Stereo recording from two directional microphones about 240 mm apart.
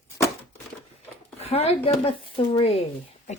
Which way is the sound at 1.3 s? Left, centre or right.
Left.